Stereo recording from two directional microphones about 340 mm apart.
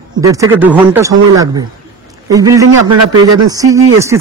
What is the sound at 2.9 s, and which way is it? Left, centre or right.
Speech, right.